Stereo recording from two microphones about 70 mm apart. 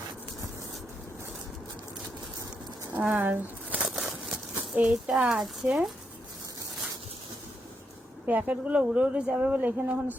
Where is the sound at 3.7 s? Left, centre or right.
Centre.